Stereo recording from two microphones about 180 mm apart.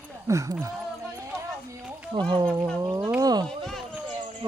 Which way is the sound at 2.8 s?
15° right (ahead or behind).